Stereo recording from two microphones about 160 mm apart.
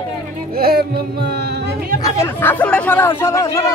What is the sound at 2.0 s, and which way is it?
Speech, 15° left (ahead or behind).